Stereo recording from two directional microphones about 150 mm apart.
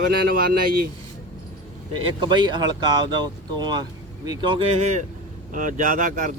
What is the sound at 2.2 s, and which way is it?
Speech, 30° right (ahead or behind).